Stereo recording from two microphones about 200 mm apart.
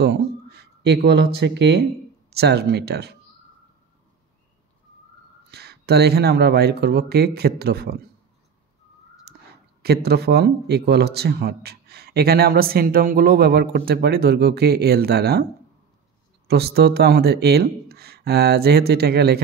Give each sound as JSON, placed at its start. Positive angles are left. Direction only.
{"t": 0.0, "sound": "speech", "side_deg": -55}
{"t": 5.5, "sound": "speech", "side_deg": -55}
{"t": 9.3, "sound": "whispering", "side_deg": -55}
{"t": 9.8, "sound": "speech", "side_deg": -55}
{"t": 16.4, "sound": "speech", "side_deg": -55}